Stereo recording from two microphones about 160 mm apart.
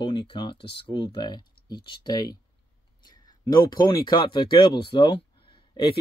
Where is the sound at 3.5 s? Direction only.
25° left (ahead or behind).